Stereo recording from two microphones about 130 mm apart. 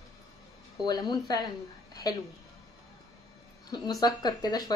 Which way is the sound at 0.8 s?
30° left (ahead or behind).